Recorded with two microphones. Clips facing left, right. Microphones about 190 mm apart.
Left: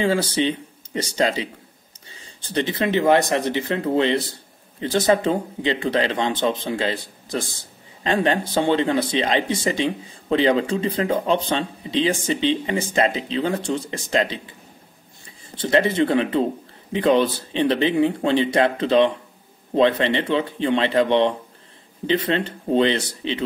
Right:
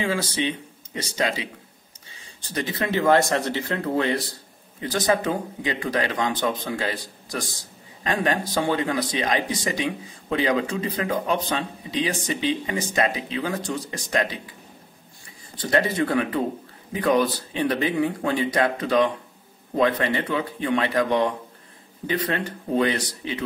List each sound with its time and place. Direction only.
0.0 s speech: 30° left (ahead or behind)